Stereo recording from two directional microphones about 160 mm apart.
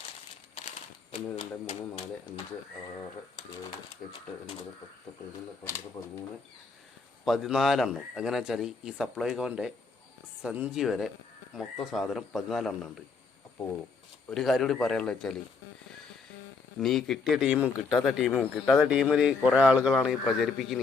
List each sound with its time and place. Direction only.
1.1 s speech: 35° left (ahead or behind)
6.0 s speech: 35° left (ahead or behind)
7.3 s speech: centre (ahead or behind)
14.3 s speech: centre (ahead or behind)
16.8 s speech: centre (ahead or behind)